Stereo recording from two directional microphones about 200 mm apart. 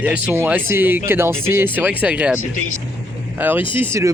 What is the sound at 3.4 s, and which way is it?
Speech, 10° right (ahead or behind).